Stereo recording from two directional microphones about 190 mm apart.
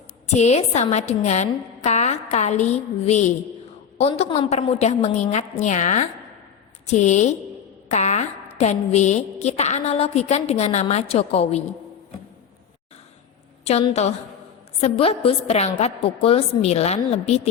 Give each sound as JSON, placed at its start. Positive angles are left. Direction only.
{"t": 0.3, "sound": "a woman's voice", "side_deg": 35}
{"t": 13.7, "sound": "a woman's voice", "side_deg": 35}